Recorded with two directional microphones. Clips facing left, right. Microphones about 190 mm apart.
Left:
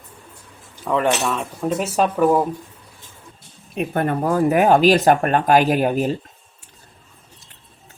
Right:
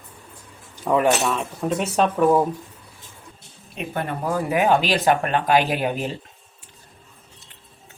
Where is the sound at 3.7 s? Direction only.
50° left (ahead or behind).